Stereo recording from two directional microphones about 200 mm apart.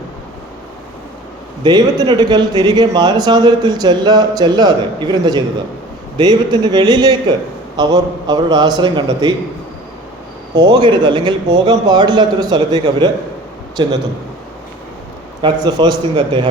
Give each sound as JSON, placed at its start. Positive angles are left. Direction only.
{"t": 1.6, "sound": "speech", "side_deg": -20}
{"t": 10.5, "sound": "speech", "side_deg": -20}
{"t": 15.4, "sound": "speech", "side_deg": -20}